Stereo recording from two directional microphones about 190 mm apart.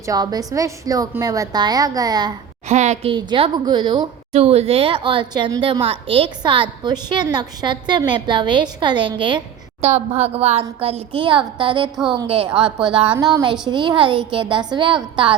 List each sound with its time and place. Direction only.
0.0 s a woman's voice: 20° right (ahead or behind)
2.6 s a woman's voice: 35° right (ahead or behind)